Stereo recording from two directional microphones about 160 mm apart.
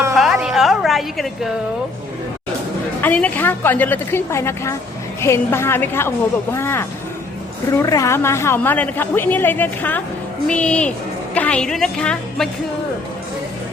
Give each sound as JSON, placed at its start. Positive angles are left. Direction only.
{"t": 0.2, "sound": "music", "side_deg": 0}
{"t": 3.0, "sound": "a woman's voice", "side_deg": 10}